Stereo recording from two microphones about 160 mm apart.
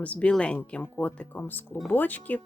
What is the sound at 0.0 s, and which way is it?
Speech, 10° left (ahead or behind).